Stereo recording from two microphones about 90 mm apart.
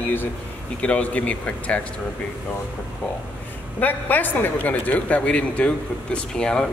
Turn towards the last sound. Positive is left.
turn(degrees=10)  # may be behind; listen again after turning